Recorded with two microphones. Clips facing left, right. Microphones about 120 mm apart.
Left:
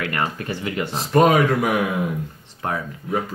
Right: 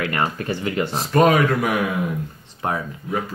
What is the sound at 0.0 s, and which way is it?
Speech, 30° right (ahead or behind).